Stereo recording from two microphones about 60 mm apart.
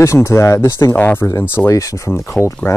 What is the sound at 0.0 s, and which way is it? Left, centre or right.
Speech, left.